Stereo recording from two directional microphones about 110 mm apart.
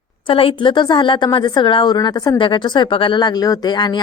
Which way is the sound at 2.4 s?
45° left (ahead or behind).